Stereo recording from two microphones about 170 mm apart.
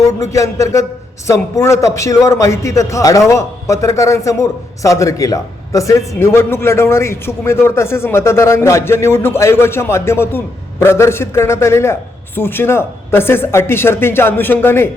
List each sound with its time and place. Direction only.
0.2 s a man's voice: 15° left (ahead or behind)